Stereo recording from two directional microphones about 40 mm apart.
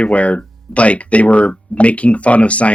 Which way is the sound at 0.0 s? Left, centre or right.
Left.